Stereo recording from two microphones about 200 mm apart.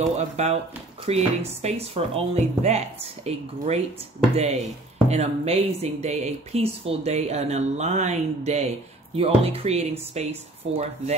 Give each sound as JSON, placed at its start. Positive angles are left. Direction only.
{"t": 0.0, "sound": "speech", "side_deg": -35}
{"t": 5.0, "sound": "speech", "side_deg": -30}